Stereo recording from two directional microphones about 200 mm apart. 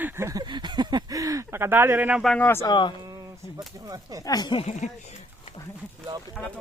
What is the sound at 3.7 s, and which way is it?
Speech, 20° right (ahead or behind).